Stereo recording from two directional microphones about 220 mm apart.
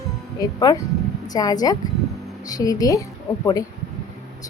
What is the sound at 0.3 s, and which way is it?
A woman's voice, 20° left (ahead or behind).